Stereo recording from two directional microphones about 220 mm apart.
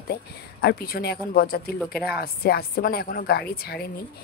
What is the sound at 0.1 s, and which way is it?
Speech, 45° left (ahead or behind).